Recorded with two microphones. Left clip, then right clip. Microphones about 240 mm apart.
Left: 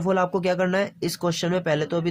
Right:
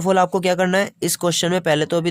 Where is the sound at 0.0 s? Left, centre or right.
Right.